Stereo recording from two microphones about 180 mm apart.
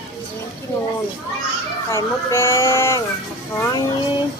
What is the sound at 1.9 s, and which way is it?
Speech, 15° left (ahead or behind).